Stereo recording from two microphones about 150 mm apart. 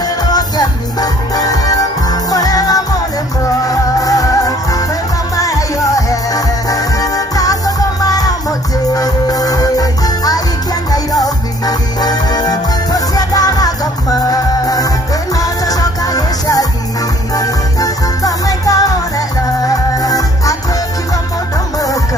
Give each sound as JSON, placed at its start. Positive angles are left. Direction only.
{"t": 0.0, "sound": "music", "side_deg": 25}
{"t": 4.0, "sound": "music", "side_deg": 25}